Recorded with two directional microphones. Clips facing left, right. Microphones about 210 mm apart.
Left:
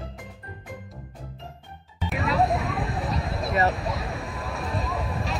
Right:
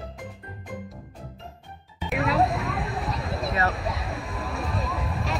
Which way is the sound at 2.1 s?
Centre (ahead or behind).